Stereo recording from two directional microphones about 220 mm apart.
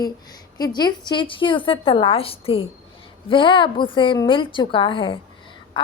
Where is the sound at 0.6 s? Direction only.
20° left (ahead or behind).